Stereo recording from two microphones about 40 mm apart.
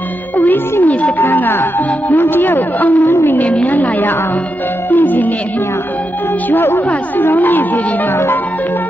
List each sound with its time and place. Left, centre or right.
2.0 s a man's voice: left
4.9 s music: left
6.5 s speech: left
6.9 s a man's voice: left